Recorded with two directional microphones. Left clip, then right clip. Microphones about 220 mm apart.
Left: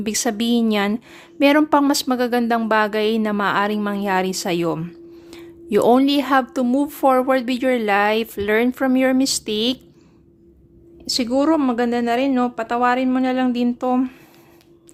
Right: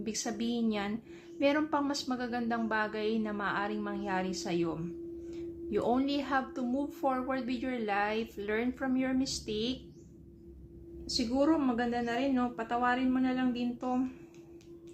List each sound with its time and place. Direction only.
0.0 s a woman's voice: 50° left (ahead or behind)
11.0 s a woman's voice: 50° left (ahead or behind)